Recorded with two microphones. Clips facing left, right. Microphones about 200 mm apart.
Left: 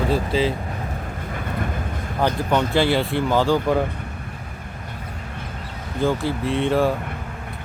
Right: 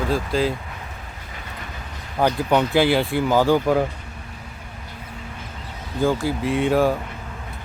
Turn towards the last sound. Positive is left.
turn(degrees=-5)  # may be behind; listen again after turning